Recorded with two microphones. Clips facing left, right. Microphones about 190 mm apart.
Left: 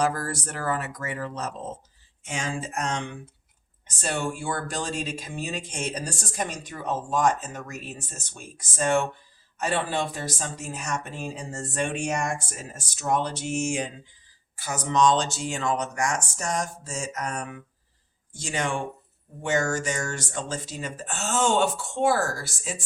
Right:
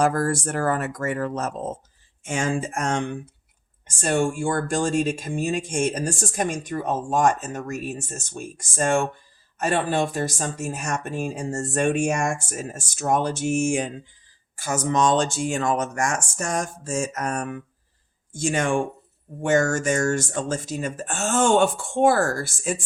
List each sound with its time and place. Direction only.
0.0 s speech: 50° right (ahead or behind)